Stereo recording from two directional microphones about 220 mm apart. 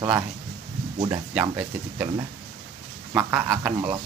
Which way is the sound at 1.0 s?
10° right (ahead or behind).